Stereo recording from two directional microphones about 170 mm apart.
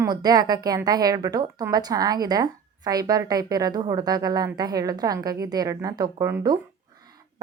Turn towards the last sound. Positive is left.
turn(degrees=-15)  # may be behind; listen again after turning